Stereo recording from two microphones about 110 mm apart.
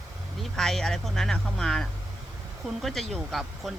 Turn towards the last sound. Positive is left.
turn(degrees=0)  # may be behind; listen again after turning